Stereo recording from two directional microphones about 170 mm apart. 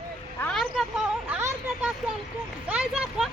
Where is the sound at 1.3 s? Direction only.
10° right (ahead or behind).